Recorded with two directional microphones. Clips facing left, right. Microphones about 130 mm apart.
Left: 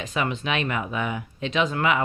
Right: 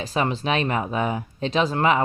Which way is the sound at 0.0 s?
35° right (ahead or behind).